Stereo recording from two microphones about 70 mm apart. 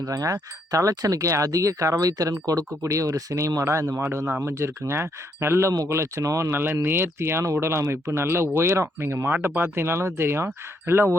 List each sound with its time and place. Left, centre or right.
0.0 s speech: right
6.5 s speech: right